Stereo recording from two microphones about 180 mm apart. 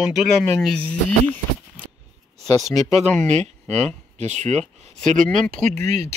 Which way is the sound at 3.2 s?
40° right (ahead or behind).